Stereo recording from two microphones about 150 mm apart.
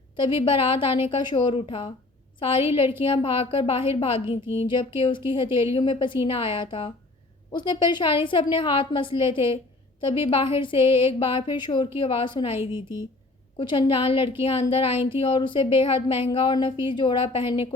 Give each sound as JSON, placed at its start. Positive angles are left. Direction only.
{"t": 0.2, "sound": "a woman's voice", "side_deg": 35}
{"t": 13.6, "sound": "a woman's voice", "side_deg": 35}